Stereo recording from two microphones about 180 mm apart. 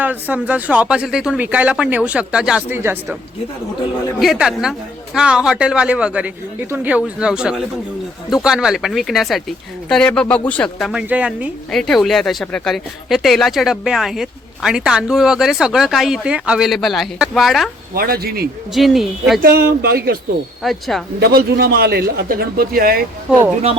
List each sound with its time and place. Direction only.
0.0 s speech: 10° right (ahead or behind)
4.2 s speech: centre (ahead or behind)
17.9 s speech: 55° right (ahead or behind)
18.7 s speech: centre (ahead or behind)
19.4 s speech: 60° right (ahead or behind)
20.6 s speech: centre (ahead or behind)
21.2 s speech: 60° right (ahead or behind)